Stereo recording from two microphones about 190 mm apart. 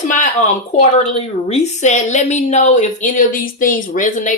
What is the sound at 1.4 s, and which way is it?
A woman's voice, 35° left (ahead or behind).